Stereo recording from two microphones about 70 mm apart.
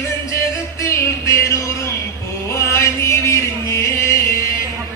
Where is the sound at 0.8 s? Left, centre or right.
Left.